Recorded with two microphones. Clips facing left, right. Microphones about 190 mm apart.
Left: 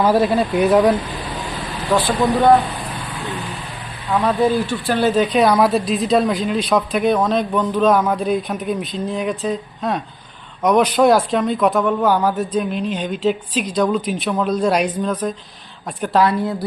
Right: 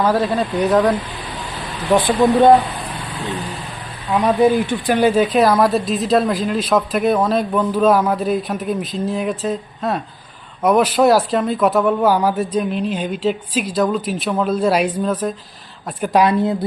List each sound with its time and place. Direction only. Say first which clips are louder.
0.0 s speech: left 2 dB; 10° left (ahead or behind)
1.9 s speech: right 3 dB; 20° right (ahead or behind)
4.1 s speech: right 2 dB; 15° right (ahead or behind)
16.2 s a woman's voice: right 2 dB; 20° right (ahead or behind)